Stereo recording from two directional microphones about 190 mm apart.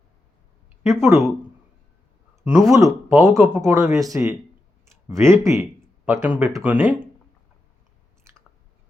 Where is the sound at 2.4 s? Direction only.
15° right (ahead or behind).